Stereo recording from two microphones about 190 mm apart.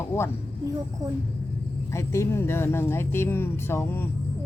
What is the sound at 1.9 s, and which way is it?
Speech, 15° left (ahead or behind).